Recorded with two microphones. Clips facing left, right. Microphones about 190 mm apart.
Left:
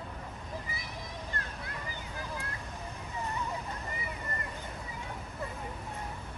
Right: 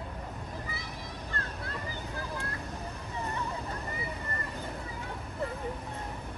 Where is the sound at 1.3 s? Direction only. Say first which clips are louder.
Right 5 dB; 15° left (ahead or behind).